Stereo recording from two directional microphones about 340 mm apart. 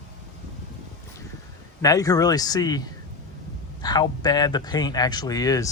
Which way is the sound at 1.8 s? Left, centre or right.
Centre.